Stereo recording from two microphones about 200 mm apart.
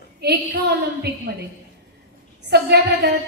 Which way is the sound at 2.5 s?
55° right (ahead or behind).